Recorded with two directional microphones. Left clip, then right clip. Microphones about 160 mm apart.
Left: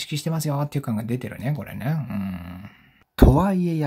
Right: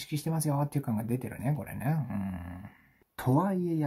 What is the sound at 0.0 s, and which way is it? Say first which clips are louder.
Speech: left 6 dB; 30° left (ahead or behind).